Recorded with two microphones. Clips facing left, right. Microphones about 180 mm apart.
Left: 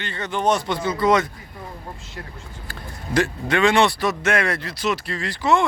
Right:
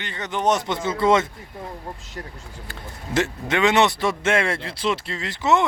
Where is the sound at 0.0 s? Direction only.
15° right (ahead or behind).